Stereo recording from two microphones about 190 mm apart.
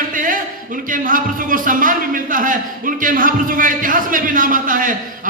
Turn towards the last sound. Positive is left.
turn(degrees=-45)  # may be behind; listen again after turning